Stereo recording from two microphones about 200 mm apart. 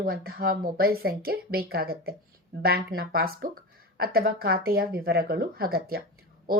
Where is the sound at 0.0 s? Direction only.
50° right (ahead or behind).